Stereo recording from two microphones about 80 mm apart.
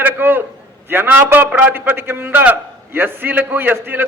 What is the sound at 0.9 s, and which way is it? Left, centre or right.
A man's voice, right.